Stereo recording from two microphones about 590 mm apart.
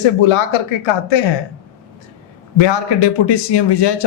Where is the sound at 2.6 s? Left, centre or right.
Left.